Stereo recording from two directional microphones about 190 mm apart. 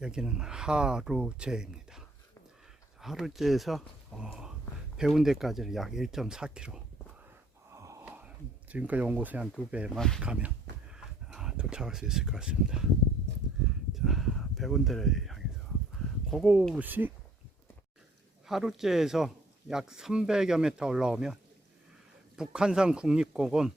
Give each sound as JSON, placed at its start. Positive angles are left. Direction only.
{"t": 0.0, "sound": "speech", "side_deg": -5}
{"t": 7.7, "sound": "wheeze", "side_deg": -15}
{"t": 8.7, "sound": "speech", "side_deg": -5}
{"t": 13.9, "sound": "a sound", "side_deg": 0}
{"t": 16.3, "sound": "speech", "side_deg": -5}
{"t": 18.4, "sound": "speech", "side_deg": 0}
{"t": 22.4, "sound": "speech", "side_deg": -5}